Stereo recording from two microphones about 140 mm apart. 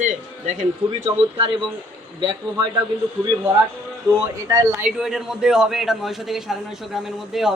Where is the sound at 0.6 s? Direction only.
50° right (ahead or behind).